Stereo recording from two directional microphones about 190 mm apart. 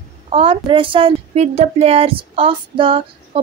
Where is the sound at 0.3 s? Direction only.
30° right (ahead or behind).